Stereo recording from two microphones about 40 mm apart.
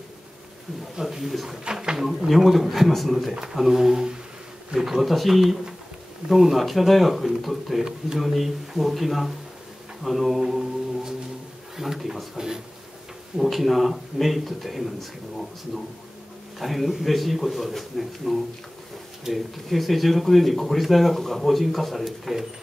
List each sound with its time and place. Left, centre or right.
0.9 s speech: centre
1.6 s speech: centre
2.0 s speech: centre
10.0 s mantra: centre
11.7 s speech: centre
13.4 s speech: centre